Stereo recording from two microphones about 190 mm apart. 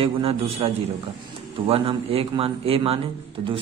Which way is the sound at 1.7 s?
30° right (ahead or behind).